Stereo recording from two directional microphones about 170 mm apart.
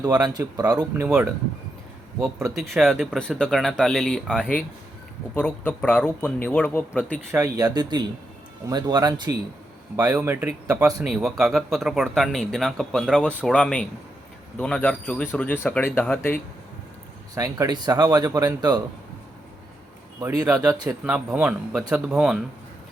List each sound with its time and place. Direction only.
0.0 s speech: 20° right (ahead or behind)
1.0 s speech: 10° right (ahead or behind)
2.6 s speech: centre (ahead or behind)
7.3 s speech: 15° right (ahead or behind)
11.0 s speech: centre (ahead or behind)
17.3 s speech: 20° right (ahead or behind)
20.2 s speech: 20° right (ahead or behind)
20.8 s speech: 10° right (ahead or behind)